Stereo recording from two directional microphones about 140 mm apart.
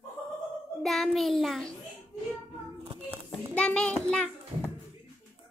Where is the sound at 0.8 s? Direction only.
Centre (ahead or behind).